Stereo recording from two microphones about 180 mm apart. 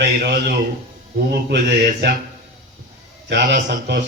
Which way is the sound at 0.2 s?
60° right (ahead or behind).